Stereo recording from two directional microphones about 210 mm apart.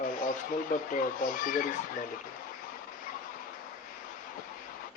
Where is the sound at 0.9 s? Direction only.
40° left (ahead or behind).